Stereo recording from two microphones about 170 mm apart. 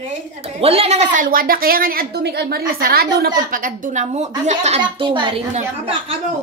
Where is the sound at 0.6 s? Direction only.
35° right (ahead or behind).